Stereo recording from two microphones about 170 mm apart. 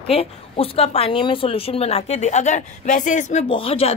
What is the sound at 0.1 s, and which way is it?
A woman's voice, 35° left (ahead or behind).